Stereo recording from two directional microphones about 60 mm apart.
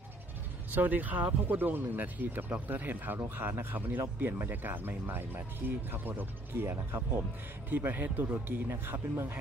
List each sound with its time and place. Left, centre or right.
0.7 s speech: right
7.7 s speech: right